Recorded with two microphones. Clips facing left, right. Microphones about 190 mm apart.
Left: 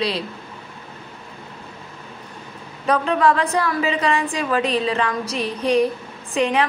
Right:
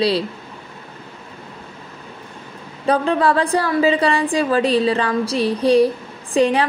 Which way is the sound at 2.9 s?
30° right (ahead or behind).